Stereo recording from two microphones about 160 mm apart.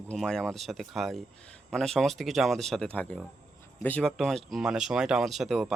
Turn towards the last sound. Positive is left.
turn(degrees=0)  # may be behind; listen again after turning